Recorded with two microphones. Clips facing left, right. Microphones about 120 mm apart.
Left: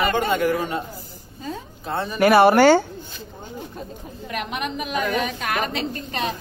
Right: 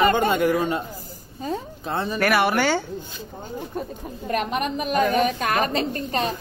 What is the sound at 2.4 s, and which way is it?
Speech, 40° left (ahead or behind).